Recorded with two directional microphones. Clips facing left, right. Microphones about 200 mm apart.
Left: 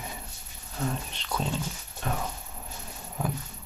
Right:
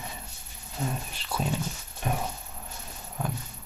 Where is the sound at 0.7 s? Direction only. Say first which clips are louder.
Left 1 dB; 5° right (ahead or behind).